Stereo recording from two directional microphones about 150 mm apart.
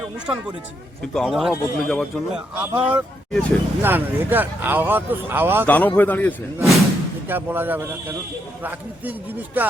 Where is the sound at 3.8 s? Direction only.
15° right (ahead or behind).